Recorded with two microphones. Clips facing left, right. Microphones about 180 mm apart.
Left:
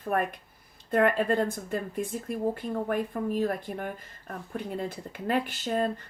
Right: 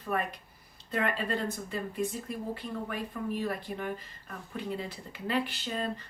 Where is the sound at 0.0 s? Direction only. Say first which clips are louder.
Left 4 dB; 50° left (ahead or behind).